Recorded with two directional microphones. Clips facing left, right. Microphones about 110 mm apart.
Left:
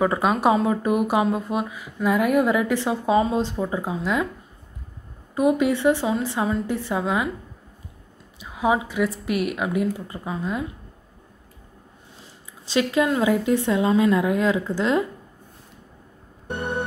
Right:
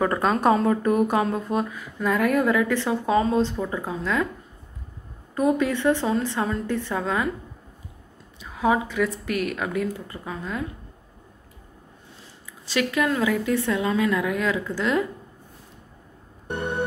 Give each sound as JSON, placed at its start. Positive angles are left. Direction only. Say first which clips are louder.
{"t": 0.0, "sound": "speech", "louder": "left 1 dB", "side_deg": 10}
{"t": 5.3, "sound": "speech", "louder": "left 2 dB", "side_deg": 15}
{"t": 8.4, "sound": "speech", "louder": "even", "side_deg": 15}
{"t": 12.6, "sound": "a woman's voice", "louder": "left 3 dB", "side_deg": 20}